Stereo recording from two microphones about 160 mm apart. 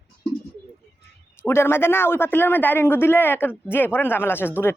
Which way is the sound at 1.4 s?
15° left (ahead or behind).